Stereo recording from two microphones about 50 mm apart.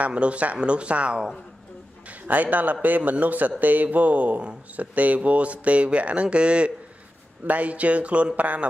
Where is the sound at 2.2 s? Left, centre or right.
Right.